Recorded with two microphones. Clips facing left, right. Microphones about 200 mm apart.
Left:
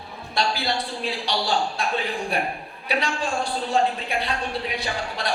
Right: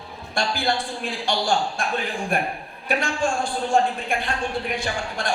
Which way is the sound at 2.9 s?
50° right (ahead or behind).